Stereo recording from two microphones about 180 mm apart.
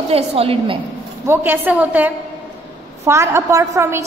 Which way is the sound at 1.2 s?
10° right (ahead or behind).